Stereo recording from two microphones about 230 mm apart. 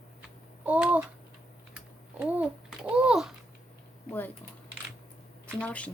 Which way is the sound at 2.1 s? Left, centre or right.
Centre.